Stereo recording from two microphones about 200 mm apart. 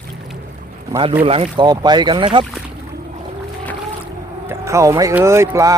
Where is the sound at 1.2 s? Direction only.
30° right (ahead or behind).